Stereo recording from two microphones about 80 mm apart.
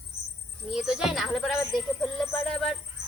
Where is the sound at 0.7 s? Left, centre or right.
Centre.